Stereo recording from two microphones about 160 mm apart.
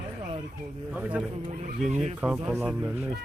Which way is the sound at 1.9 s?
45° right (ahead or behind).